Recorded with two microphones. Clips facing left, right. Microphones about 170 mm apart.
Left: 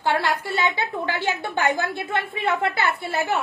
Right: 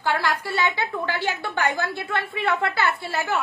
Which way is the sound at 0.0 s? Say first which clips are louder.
Left 2 dB; 25° left (ahead or behind).